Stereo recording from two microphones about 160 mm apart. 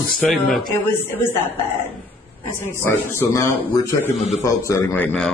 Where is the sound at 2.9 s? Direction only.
15° left (ahead or behind).